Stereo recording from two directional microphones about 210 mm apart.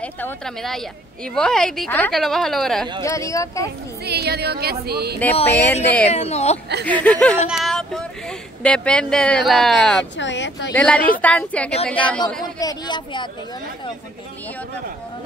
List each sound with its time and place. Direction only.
0.0 s speech: 5° left (ahead or behind)
3.0 s a woman's voice: 15° left (ahead or behind)
4.0 s music: 50° right (ahead or behind)
5.3 s speech: 30° left (ahead or behind)
6.9 s a woman's voice: 5° left (ahead or behind)
10.1 s speech: 60° left (ahead or behind)
10.7 s a woman's voice: 5° left (ahead or behind)
12.5 s speech: 20° left (ahead or behind)